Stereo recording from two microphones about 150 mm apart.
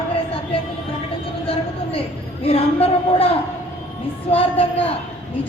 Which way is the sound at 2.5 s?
40° left (ahead or behind).